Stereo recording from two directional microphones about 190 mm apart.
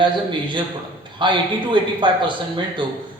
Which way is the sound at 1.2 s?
25° right (ahead or behind).